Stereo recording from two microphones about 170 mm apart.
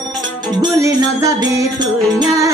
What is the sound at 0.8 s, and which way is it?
Music, 20° right (ahead or behind).